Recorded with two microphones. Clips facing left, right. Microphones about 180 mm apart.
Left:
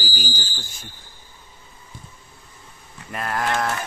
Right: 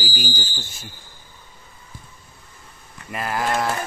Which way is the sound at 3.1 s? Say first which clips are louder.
Right 1 dB; centre (ahead or behind).